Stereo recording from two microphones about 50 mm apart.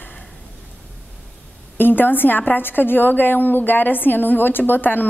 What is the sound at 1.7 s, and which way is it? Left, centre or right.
A woman's voice, left.